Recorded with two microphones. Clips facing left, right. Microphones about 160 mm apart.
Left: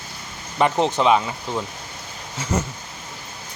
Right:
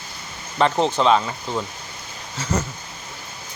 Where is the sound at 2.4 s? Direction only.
20° left (ahead or behind).